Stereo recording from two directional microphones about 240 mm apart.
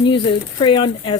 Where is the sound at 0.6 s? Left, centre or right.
Centre.